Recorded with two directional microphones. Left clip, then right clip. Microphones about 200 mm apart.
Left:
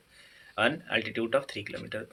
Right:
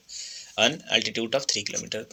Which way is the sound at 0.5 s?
45° right (ahead or behind).